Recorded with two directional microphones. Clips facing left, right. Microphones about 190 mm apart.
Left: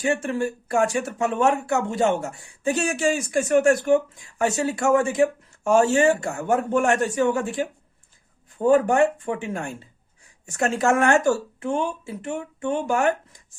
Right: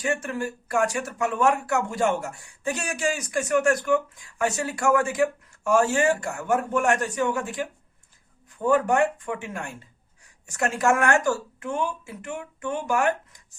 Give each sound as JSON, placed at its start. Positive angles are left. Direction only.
{"t": 0.1, "sound": "speech", "side_deg": 25}